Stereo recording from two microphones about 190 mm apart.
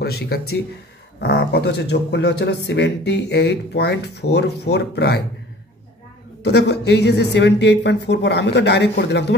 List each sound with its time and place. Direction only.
0.0 s speech: 55° left (ahead or behind)
6.4 s speech: 60° left (ahead or behind)